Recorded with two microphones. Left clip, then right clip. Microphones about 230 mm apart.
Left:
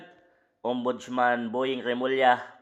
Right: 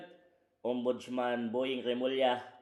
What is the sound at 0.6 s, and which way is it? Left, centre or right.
Speech, left.